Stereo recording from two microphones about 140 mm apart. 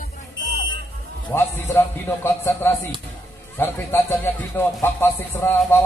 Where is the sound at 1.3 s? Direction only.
15° left (ahead or behind).